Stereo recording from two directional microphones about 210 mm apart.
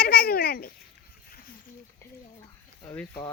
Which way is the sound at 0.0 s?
45° left (ahead or behind).